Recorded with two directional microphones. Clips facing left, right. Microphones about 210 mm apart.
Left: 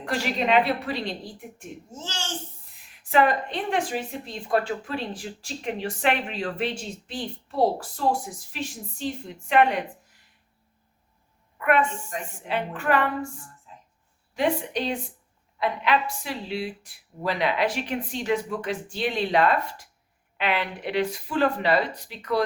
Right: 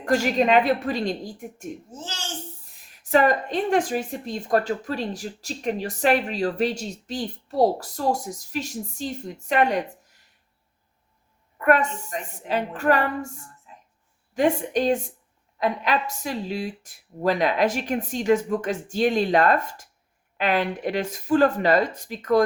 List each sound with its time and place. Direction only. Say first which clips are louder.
0.0 s speech: right 6 dB; 45° right (ahead or behind)
2.9 s speech: right 2 dB; 40° right (ahead or behind)
11.5 s a woman's voice: right 2 dB; 40° right (ahead or behind)